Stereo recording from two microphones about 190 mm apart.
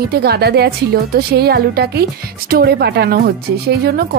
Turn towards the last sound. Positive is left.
turn(degrees=-55)  # may be behind; listen again after turning